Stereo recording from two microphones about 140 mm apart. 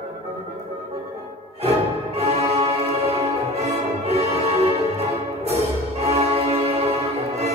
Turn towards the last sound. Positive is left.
turn(degrees=-50)  # may be behind; listen again after turning